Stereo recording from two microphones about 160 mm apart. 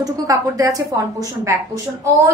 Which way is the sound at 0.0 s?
20° right (ahead or behind).